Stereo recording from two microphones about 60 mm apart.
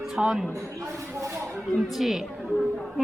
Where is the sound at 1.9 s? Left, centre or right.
Centre.